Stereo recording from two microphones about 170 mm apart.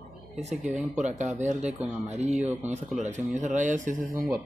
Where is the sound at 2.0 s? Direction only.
45° right (ahead or behind).